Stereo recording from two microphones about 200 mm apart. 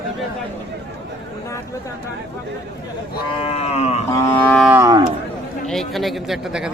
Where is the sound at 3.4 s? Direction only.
30° left (ahead or behind).